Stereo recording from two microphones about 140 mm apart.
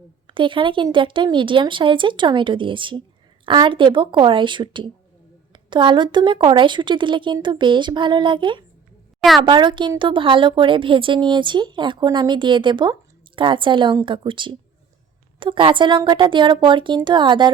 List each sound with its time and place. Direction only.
0.3 s a woman's voice: 35° right (ahead or behind)